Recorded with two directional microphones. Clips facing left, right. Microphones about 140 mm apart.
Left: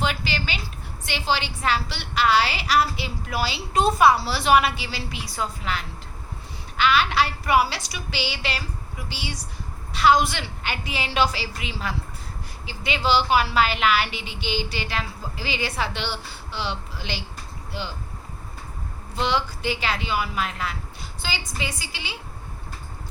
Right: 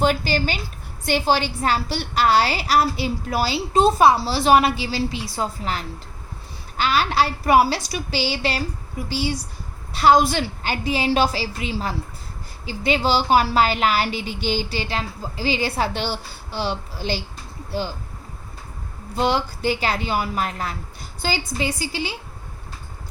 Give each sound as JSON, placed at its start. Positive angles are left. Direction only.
{"t": 0.0, "sound": "a woman's voice", "side_deg": -45}
{"t": 19.1, "sound": "a woman's voice", "side_deg": -40}